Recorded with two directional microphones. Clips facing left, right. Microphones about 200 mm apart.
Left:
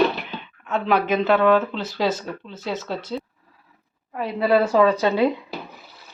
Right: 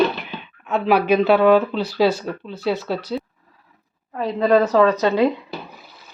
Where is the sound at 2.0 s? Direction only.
20° left (ahead or behind).